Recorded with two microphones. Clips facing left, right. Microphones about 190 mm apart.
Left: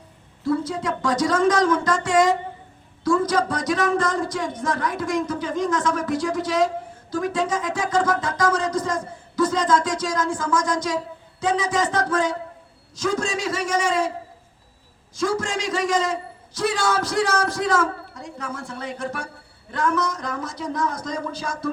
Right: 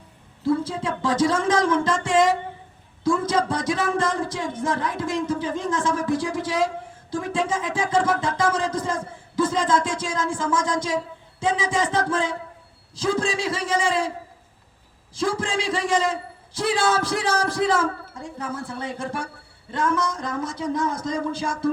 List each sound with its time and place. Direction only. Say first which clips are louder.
0.4 s music: even; 30° right (ahead or behind)
15.1 s music: left 1 dB; 30° right (ahead or behind)